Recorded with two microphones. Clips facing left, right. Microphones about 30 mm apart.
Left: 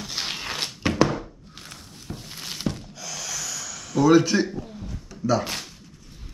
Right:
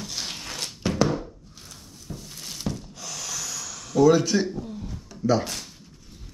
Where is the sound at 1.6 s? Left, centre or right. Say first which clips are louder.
Left 5 dB; left.